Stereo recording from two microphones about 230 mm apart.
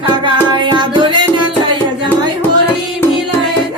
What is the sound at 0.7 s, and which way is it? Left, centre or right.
Music, centre.